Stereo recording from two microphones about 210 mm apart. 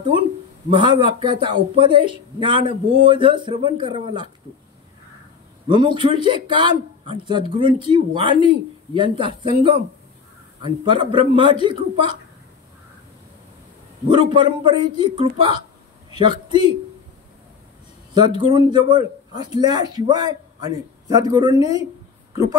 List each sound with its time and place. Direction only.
0.7 s a man's voice: 25° right (ahead or behind)
5.7 s a man's voice: 20° right (ahead or behind)
14.0 s a man's voice: 20° right (ahead or behind)
18.4 s a man's voice: 20° right (ahead or behind)